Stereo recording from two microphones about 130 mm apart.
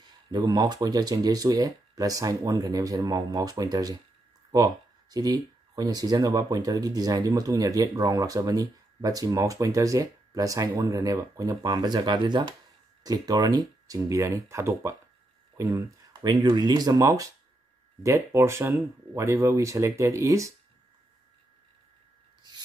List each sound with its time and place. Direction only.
0.0 s speech: 35° right (ahead or behind)
5.1 s speech: 30° right (ahead or behind)